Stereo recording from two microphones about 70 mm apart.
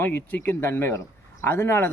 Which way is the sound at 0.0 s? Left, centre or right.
Left.